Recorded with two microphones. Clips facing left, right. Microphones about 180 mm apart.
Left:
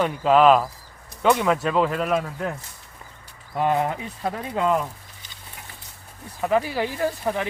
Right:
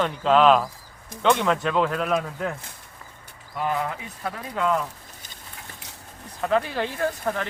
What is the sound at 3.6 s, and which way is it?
Speech, 25° left (ahead or behind).